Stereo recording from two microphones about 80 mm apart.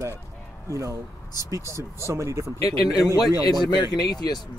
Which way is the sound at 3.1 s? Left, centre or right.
Left.